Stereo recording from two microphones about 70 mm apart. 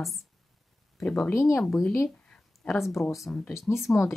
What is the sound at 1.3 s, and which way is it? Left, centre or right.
Speech, left.